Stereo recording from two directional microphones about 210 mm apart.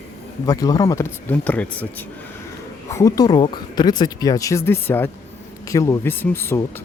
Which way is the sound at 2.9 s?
15° left (ahead or behind).